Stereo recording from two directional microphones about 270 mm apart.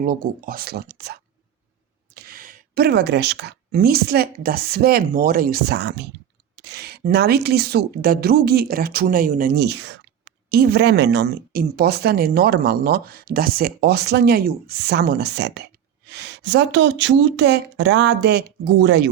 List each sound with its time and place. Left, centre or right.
0.0 s speech: right